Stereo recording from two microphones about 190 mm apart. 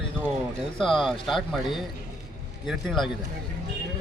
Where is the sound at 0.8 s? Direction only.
Centre (ahead or behind).